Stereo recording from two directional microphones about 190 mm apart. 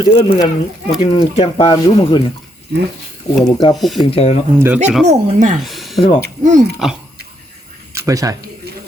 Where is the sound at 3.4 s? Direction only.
20° left (ahead or behind).